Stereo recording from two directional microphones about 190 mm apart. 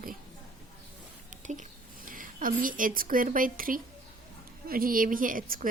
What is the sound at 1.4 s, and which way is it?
A woman's voice, 40° right (ahead or behind).